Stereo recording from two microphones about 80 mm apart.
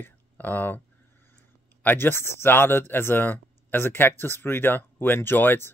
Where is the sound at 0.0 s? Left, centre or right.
Left.